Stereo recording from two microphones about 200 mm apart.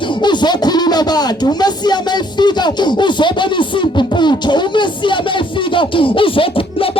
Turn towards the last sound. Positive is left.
turn(degrees=25)  # may be behind; listen again after turning